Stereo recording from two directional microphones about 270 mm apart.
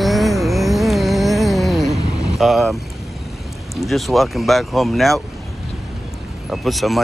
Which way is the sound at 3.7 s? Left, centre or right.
Centre.